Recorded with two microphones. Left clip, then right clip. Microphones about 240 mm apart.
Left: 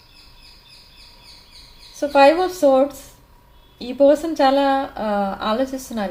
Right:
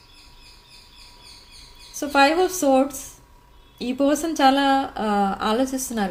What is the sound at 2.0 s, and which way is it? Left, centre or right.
Speech, right.